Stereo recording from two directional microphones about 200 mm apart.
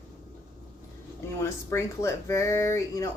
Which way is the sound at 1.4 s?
15° left (ahead or behind).